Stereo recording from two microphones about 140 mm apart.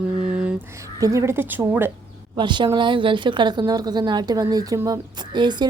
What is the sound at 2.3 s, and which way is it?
A woman's voice, 35° right (ahead or behind).